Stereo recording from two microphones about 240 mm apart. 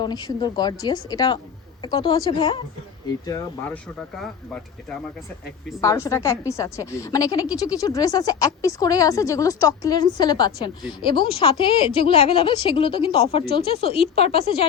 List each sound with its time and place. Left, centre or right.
0.0 s a woman's voice: centre
5.8 s a woman's voice: centre